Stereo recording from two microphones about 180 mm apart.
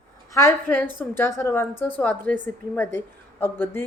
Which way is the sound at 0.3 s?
15° left (ahead or behind).